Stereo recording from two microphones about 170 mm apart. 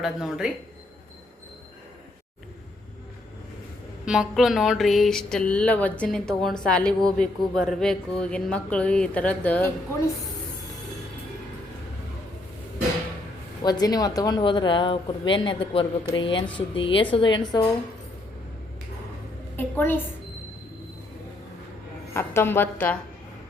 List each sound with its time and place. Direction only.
0.0 s speech: 5° right (ahead or behind)
4.0 s speech: 5° right (ahead or behind)
13.6 s speech: 25° left (ahead or behind)
19.5 s a woman's voice: 10° left (ahead or behind)
22.1 s speech: 15° left (ahead or behind)